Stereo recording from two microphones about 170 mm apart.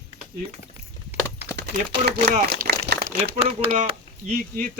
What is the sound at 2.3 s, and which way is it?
Speech, 65° right (ahead or behind).